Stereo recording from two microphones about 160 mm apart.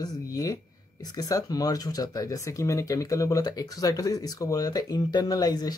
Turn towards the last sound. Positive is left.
turn(degrees=25)  # may be behind; listen again after turning